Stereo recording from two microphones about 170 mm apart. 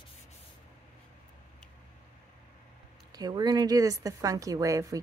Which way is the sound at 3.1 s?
25° right (ahead or behind).